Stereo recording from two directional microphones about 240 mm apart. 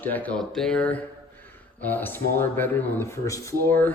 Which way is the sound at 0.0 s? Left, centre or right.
Centre.